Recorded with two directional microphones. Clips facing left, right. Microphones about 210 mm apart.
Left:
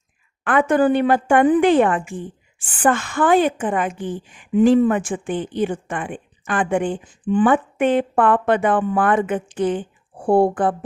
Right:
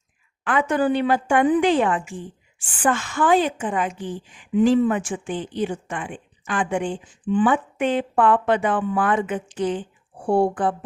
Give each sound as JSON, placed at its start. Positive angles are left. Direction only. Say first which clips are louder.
{"t": 0.4, "sound": "a woman's voice", "louder": "left 4 dB", "side_deg": 55}